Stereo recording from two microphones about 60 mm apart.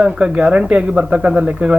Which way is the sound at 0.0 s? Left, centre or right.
Centre.